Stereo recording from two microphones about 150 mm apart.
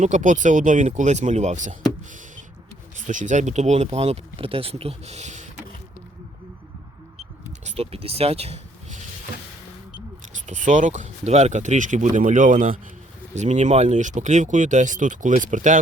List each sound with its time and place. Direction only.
0.0 s speech: 55° right (ahead or behind)
3.1 s speech: 55° right (ahead or behind)
7.6 s speech: 40° right (ahead or behind)
10.4 s speech: 55° right (ahead or behind)